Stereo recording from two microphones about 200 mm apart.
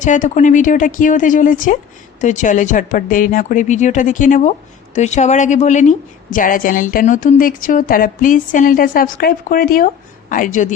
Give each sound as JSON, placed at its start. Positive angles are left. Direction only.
{"t": 0.0, "sound": "a woman's voice", "side_deg": 40}